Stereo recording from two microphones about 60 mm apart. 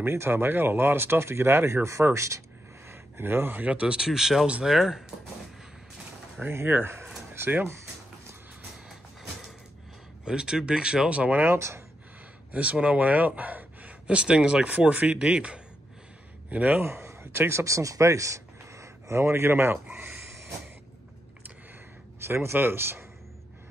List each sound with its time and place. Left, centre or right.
0.0 s speech: right
2.9 s a sound: right
3.6 s speech: centre
6.5 s speech: right
10.2 s speech: centre; by 11.5 s right
11.5 s speech: right
12.5 s speech: right
16.4 s speech: right
16.8 s speech: right
19.9 s speech: right
22.2 s speech: right